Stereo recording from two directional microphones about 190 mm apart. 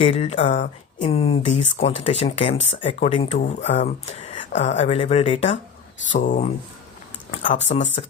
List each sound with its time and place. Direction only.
0.0 s speech: 30° left (ahead or behind)